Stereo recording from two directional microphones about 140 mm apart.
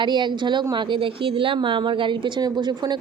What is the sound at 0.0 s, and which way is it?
Speech, 35° right (ahead or behind).